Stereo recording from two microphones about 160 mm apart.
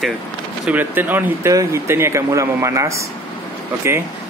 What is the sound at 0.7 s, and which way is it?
Speech, 10° right (ahead or behind).